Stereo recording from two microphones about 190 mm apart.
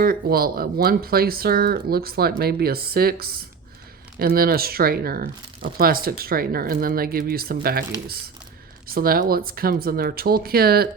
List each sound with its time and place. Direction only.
0.0 s speech: 50° right (ahead or behind)